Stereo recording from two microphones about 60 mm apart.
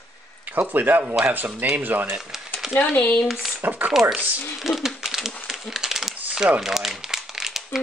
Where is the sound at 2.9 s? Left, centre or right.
Left.